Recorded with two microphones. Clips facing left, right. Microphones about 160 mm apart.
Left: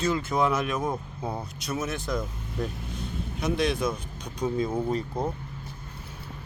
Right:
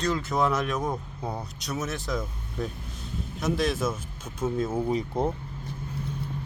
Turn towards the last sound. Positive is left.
turn(degrees=-5)  # may be behind; listen again after turning